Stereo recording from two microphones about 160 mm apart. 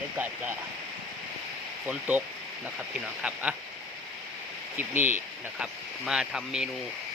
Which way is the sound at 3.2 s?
10° right (ahead or behind).